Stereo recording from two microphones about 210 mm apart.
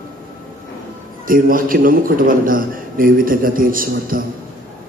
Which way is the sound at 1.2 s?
40° right (ahead or behind).